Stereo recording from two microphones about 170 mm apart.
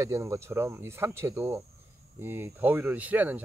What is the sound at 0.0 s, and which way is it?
Speech, 20° right (ahead or behind).